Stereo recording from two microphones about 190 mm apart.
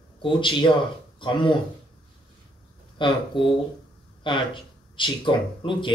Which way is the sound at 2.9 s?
25° left (ahead or behind).